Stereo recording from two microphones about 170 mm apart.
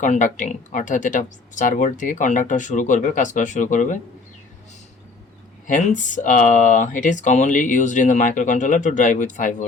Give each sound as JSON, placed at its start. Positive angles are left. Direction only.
{"t": 0.0, "sound": "speech", "side_deg": 45}
{"t": 5.6, "sound": "speech", "side_deg": 50}